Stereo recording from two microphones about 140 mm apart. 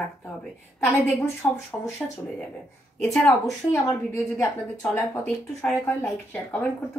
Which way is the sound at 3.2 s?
20° left (ahead or behind).